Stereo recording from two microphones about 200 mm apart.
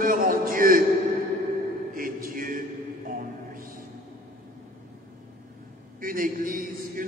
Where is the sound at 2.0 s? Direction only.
45° right (ahead or behind).